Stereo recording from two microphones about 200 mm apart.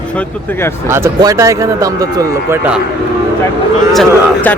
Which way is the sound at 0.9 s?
15° right (ahead or behind).